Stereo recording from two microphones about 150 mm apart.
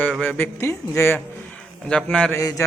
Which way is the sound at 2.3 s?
20° left (ahead or behind).